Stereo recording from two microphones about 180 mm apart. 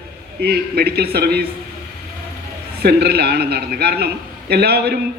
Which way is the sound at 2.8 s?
60° right (ahead or behind).